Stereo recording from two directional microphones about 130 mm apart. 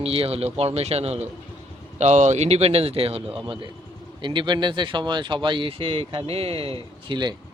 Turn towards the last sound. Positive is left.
turn(degrees=-45)  # may be behind; listen again after turning